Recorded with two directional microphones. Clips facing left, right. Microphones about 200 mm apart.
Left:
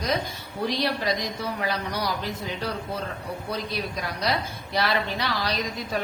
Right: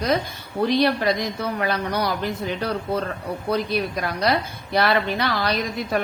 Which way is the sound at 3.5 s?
60° right (ahead or behind).